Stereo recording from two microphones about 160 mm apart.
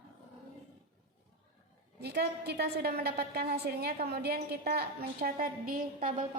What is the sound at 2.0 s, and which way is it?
A woman's voice, 90° right.